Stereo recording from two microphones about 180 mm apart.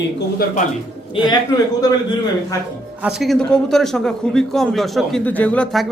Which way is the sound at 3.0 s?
Centre (ahead or behind).